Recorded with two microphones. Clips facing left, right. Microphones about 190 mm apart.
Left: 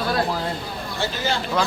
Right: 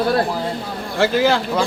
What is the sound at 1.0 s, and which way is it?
Speech, 90° right.